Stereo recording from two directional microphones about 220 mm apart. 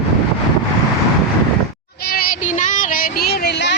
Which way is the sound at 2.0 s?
40° left (ahead or behind).